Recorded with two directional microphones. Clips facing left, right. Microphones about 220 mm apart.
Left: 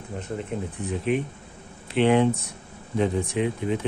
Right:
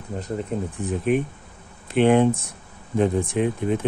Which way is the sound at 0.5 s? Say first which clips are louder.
Right 3 dB; 35° right (ahead or behind).